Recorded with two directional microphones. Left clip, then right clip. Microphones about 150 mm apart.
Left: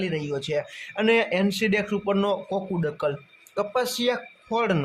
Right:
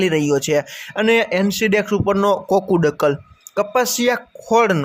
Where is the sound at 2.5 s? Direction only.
60° right (ahead or behind).